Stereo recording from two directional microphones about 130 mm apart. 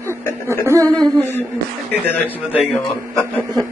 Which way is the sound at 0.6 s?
25° right (ahead or behind).